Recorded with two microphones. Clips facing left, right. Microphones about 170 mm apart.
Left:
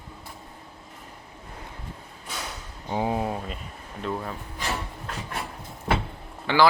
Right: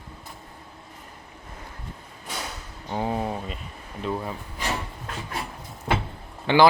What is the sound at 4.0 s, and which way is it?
Speech, 5° right (ahead or behind).